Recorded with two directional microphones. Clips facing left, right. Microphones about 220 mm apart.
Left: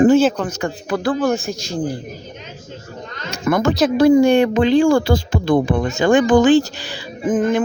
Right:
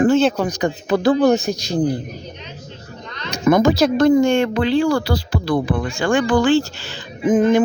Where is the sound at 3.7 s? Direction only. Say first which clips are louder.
Left 2 dB; 5° left (ahead or behind).